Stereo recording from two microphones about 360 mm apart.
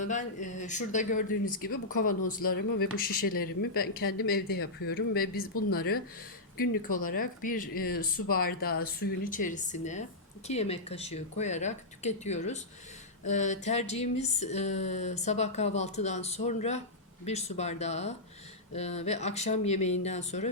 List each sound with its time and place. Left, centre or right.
0.0 s speech: left